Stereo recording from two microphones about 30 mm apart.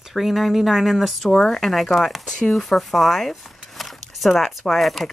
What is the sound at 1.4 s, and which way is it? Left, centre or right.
Speech, centre.